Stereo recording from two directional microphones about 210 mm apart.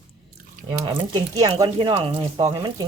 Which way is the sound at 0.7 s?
25° right (ahead or behind).